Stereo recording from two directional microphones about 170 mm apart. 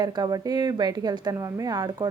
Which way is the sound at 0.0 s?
25° right (ahead or behind).